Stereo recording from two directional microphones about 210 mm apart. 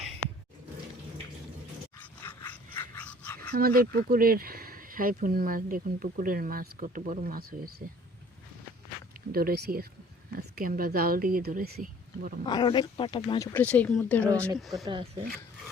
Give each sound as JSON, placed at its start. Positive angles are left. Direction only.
{"t": 2.0, "sound": "a sound", "side_deg": 10}
{"t": 3.5, "sound": "speech", "side_deg": -45}
{"t": 9.3, "sound": "speech", "side_deg": -45}
{"t": 12.5, "sound": "speech", "side_deg": 20}
{"t": 13.5, "sound": "speech", "side_deg": 10}
{"t": 14.3, "sound": "speech", "side_deg": -15}